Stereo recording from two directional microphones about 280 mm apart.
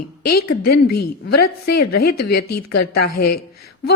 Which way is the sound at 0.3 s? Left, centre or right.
Left.